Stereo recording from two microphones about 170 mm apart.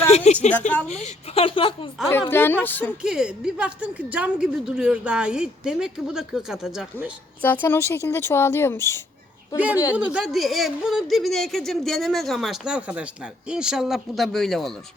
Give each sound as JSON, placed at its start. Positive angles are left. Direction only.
{"t": 0.3, "sound": "a woman's voice", "side_deg": 40}
{"t": 2.0, "sound": "a woman's voice", "side_deg": 15}
{"t": 3.0, "sound": "a woman's voice", "side_deg": -5}
{"t": 7.4, "sound": "a woman's voice", "side_deg": 10}
{"t": 9.6, "sound": "a child's voice", "side_deg": -10}